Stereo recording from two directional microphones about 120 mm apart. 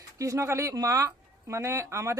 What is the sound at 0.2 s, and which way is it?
Speech, 25° right (ahead or behind).